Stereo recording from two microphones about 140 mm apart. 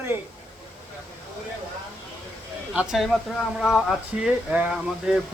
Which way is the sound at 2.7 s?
Centre (ahead or behind).